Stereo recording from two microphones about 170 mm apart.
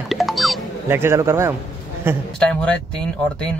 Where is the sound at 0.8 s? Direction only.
15° right (ahead or behind).